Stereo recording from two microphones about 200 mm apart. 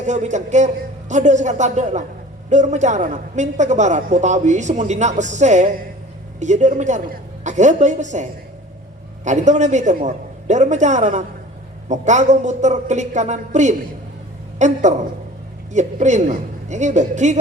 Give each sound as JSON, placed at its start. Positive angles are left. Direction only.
{"t": 0.0, "sound": "a woman's voice", "side_deg": -35}